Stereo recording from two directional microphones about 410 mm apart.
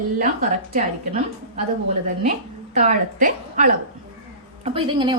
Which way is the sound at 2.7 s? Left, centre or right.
Centre.